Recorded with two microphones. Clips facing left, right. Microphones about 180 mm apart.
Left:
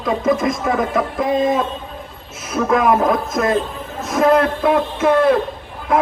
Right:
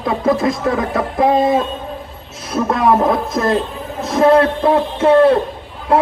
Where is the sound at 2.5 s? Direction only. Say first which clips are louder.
Right 1 dB; 35° right (ahead or behind).